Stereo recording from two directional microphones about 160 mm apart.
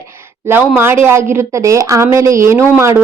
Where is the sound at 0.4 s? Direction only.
15° right (ahead or behind).